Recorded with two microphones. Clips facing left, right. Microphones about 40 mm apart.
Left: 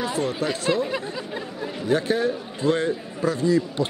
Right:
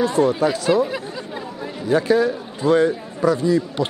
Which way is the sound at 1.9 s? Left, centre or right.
Left.